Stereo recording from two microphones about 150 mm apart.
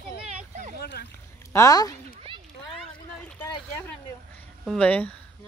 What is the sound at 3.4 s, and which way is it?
A woman's voice, 10° left (ahead or behind).